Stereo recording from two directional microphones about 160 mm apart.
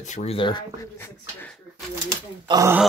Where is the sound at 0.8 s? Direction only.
15° left (ahead or behind).